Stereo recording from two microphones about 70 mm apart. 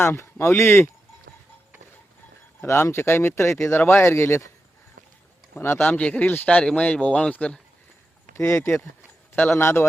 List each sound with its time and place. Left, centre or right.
0.0 s speech: left
2.6 s speech: left
5.5 s speech: left; by 7.6 s centre
8.4 s speech: left